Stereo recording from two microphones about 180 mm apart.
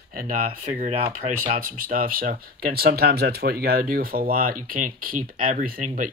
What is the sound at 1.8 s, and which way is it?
Speech, 50° right (ahead or behind).